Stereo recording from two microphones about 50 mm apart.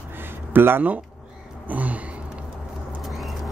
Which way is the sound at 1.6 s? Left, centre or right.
Right.